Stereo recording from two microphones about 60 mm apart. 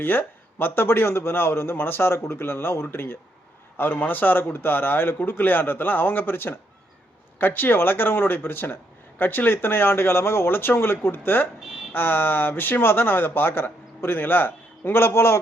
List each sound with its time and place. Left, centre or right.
0.0 s speech: left